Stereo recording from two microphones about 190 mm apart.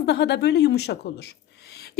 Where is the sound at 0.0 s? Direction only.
65° left (ahead or behind).